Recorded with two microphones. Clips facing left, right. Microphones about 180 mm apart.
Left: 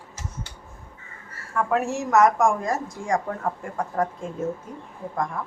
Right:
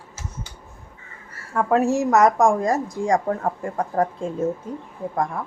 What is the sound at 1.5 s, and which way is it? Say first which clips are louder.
A woman's voice: right 5 dB; 35° right (ahead or behind).